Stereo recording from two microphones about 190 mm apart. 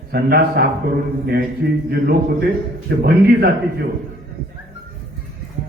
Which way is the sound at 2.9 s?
60° right (ahead or behind).